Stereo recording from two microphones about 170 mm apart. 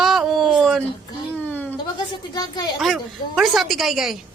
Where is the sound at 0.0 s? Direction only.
Centre (ahead or behind).